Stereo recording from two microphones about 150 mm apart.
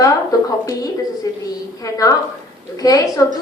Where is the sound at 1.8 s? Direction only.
25° left (ahead or behind).